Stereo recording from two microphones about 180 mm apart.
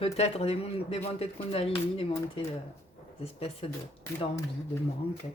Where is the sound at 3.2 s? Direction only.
35° left (ahead or behind).